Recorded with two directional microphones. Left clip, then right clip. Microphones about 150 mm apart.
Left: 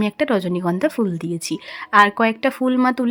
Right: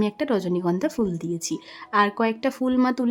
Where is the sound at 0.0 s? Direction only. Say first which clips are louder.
Left 4 dB; 15° left (ahead or behind).